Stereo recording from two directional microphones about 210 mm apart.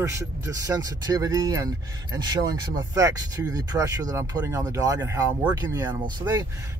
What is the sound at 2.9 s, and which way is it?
Speech, 15° right (ahead or behind).